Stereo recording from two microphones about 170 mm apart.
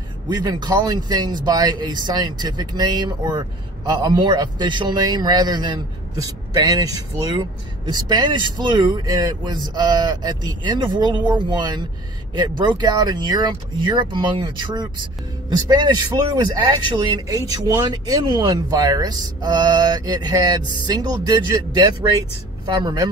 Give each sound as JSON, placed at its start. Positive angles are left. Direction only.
{"t": 0.3, "sound": "a man's voice", "side_deg": -25}